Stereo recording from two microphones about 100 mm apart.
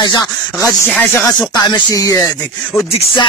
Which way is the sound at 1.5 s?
40° left (ahead or behind).